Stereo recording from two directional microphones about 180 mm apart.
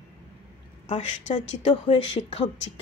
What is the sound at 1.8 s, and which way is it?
Speech, 35° left (ahead or behind).